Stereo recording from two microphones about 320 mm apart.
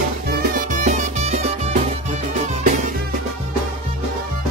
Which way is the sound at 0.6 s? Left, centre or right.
Right.